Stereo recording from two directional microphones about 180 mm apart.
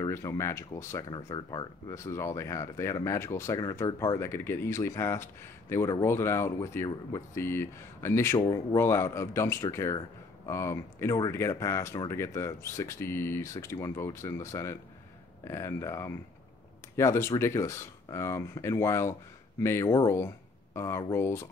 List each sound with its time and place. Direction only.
0.0 s speech: 15° left (ahead or behind)